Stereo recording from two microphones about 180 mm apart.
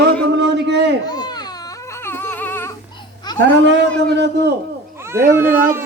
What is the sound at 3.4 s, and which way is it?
Speech, 75° right (ahead or behind).